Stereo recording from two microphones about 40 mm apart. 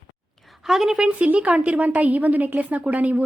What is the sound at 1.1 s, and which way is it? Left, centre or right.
A woman's voice, right.